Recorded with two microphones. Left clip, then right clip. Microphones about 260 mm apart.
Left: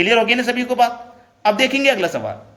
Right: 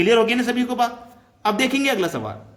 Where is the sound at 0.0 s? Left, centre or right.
Centre.